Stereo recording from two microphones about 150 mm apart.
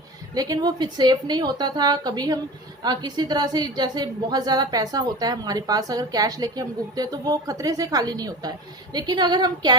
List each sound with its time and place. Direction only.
0.3 s a woman's voice: 25° right (ahead or behind)